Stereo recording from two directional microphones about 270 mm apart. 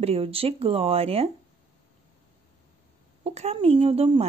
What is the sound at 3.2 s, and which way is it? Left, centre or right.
Speech, right.